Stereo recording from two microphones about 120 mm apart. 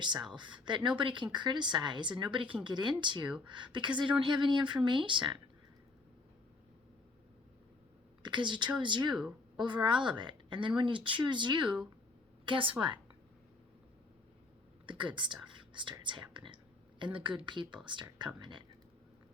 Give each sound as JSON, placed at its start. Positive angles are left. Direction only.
{"t": 0.0, "sound": "speech", "side_deg": -40}
{"t": 8.2, "sound": "a woman's voice", "side_deg": -40}
{"t": 14.8, "sound": "speech", "side_deg": -40}